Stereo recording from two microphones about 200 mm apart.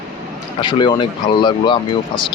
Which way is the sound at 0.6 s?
25° left (ahead or behind).